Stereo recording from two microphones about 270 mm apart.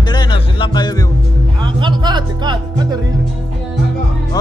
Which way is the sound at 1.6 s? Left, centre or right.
Centre.